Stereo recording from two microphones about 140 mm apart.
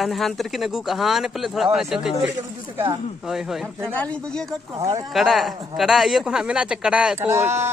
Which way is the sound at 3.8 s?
10° left (ahead or behind).